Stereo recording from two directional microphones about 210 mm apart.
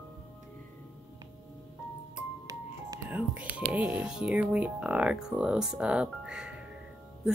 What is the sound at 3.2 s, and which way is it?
Speech, 5° right (ahead or behind).